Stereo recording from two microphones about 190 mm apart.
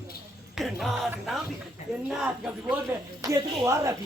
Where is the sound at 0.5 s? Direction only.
Centre (ahead or behind).